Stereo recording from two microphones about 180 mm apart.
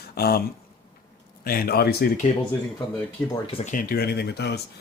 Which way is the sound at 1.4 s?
55° left (ahead or behind).